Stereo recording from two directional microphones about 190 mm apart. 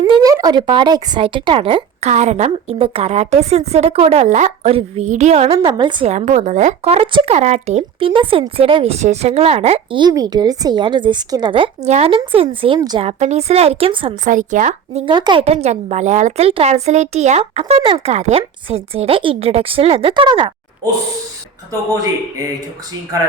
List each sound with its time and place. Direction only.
0.1 s a woman's voice: 20° right (ahead or behind)
6.1 s speech: 40° right (ahead or behind)
13.1 s a woman's voice: 35° right (ahead or behind)
14.3 s a woman's voice: 45° right (ahead or behind)
15.1 s a woman's voice: 25° right (ahead or behind)